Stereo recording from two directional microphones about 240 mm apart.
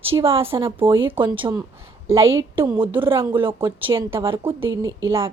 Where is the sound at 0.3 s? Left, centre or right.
Right.